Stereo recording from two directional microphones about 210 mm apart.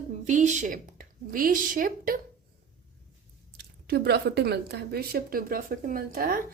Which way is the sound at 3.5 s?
50° right (ahead or behind).